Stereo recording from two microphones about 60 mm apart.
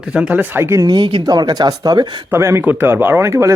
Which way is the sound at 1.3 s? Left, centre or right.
Right.